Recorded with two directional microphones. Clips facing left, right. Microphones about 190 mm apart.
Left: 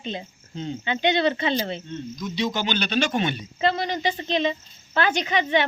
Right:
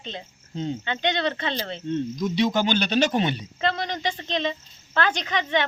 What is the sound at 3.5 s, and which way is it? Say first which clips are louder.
Speech: left 3 dB; 5° left (ahead or behind).